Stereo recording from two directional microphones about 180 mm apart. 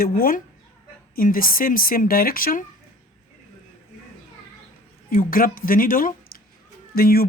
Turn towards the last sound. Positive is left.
turn(degrees=55)  # may be behind; listen again after turning